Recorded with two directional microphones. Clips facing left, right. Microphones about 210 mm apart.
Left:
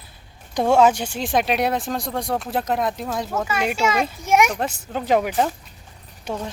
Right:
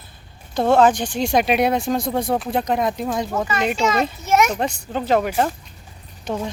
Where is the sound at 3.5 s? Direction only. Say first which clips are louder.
Even; 10° left (ahead or behind).